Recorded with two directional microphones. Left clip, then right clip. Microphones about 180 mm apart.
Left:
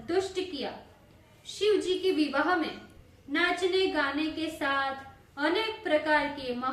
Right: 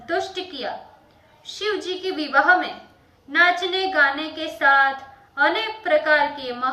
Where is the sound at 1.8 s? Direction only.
25° left (ahead or behind).